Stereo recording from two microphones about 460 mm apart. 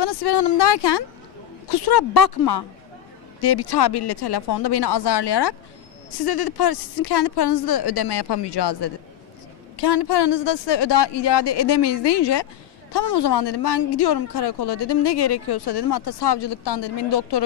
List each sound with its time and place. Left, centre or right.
0.0 s a woman's voice: left